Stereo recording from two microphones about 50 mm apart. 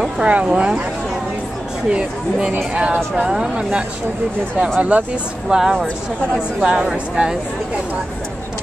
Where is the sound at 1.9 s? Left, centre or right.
Centre.